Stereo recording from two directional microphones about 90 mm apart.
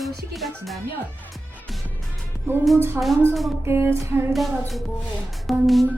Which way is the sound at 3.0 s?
25° right (ahead or behind).